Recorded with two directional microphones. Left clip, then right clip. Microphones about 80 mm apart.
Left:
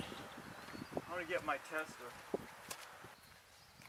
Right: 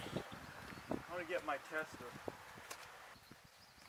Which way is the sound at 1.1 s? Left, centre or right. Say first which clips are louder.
Left 3 dB; centre.